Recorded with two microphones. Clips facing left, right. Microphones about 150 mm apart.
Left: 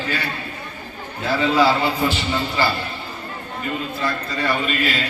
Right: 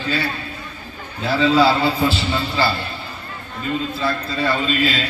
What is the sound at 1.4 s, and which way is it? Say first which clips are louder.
A man's voice: right 2 dB; 15° left (ahead or behind).